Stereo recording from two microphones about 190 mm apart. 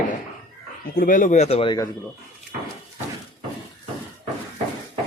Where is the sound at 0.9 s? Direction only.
45° left (ahead or behind); by 1.9 s 25° left (ahead or behind).